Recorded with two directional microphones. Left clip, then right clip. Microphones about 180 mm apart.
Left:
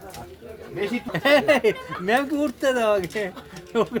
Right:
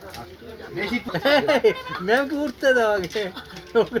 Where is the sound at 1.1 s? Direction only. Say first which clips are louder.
Left 1 dB; 65° left (ahead or behind).